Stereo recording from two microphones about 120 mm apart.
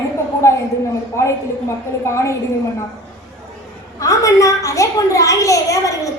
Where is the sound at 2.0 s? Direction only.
25° left (ahead or behind).